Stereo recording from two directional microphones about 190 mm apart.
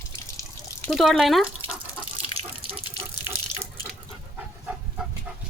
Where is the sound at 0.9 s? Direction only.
Centre (ahead or behind).